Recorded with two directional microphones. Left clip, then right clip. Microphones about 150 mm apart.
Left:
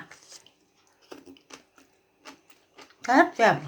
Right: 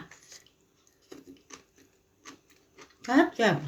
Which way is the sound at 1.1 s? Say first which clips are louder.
Left 3 dB; 25° right (ahead or behind).